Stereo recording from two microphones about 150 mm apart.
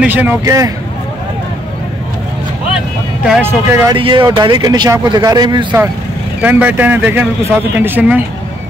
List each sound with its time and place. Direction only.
0.0 s a man's voice: 10° right (ahead or behind)
3.3 s a man's voice: 10° right (ahead or behind)
3.9 s speech: 30° right (ahead or behind)
6.4 s a man's voice: 10° right (ahead or behind)